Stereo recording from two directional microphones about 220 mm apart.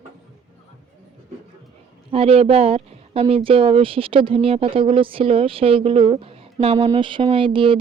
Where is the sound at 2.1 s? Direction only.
25° right (ahead or behind).